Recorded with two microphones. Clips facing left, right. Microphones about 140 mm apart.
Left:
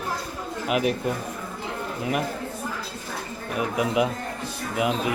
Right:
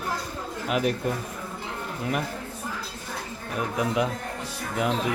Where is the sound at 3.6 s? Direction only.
10° left (ahead or behind).